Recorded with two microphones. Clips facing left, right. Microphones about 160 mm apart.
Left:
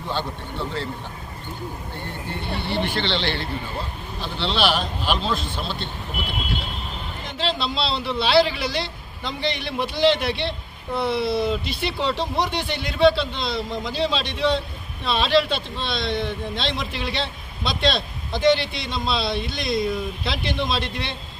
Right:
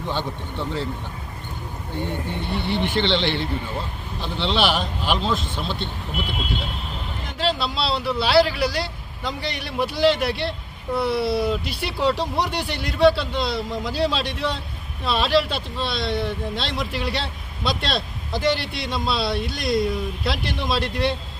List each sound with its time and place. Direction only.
0.1 s speech: 15° right (ahead or behind)
2.7 s speech: 20° right (ahead or behind)
7.3 s speech: 5° right (ahead or behind)